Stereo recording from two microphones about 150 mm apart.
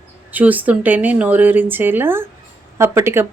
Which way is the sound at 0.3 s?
10° right (ahead or behind).